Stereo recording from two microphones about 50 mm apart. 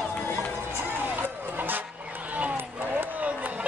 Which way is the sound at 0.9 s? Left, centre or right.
Right.